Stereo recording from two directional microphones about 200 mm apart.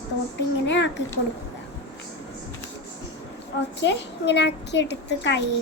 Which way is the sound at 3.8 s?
60° left (ahead or behind).